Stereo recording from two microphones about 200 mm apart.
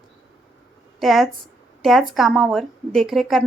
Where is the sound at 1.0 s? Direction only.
Centre (ahead or behind).